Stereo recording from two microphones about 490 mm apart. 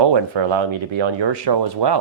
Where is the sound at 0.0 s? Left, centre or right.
Right.